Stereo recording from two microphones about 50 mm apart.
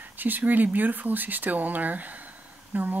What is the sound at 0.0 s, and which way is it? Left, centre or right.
Speech, right.